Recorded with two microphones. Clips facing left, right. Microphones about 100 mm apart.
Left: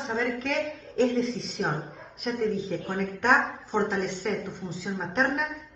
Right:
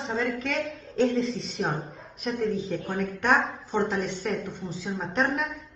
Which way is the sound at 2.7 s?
15° left (ahead or behind).